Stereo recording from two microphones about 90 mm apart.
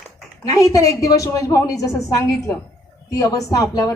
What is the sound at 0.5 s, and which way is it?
Speech, 40° left (ahead or behind).